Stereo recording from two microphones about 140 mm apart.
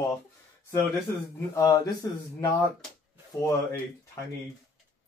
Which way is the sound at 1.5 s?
25° left (ahead or behind).